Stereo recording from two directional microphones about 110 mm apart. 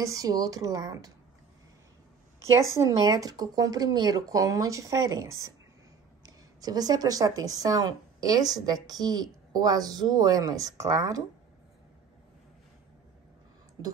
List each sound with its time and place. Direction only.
0.0 s speech: 30° right (ahead or behind)
2.6 s a woman's voice: 25° right (ahead or behind)
13.8 s speech: 35° right (ahead or behind)